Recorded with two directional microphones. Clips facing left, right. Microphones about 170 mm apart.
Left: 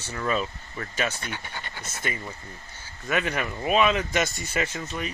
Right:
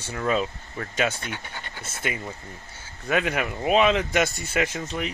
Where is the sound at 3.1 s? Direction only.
65° right (ahead or behind).